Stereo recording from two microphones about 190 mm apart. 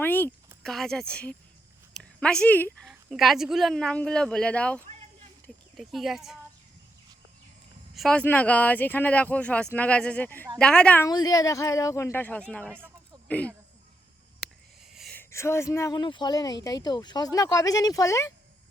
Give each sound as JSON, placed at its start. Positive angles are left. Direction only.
{"t": 0.0, "sound": "speech", "side_deg": 10}
{"t": 7.9, "sound": "speech", "side_deg": 5}
{"t": 11.1, "sound": "speech", "side_deg": 20}
{"t": 14.9, "sound": "a sound", "side_deg": 0}
{"t": 15.2, "sound": "speech", "side_deg": 15}